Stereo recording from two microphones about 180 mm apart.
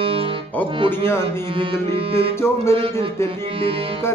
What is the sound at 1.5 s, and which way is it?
Music, 30° right (ahead or behind).